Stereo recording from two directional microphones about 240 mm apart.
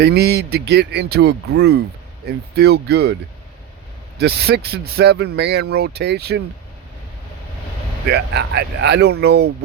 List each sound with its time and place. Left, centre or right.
0.0 s speech: right
4.2 s speech: right
8.0 s speech: right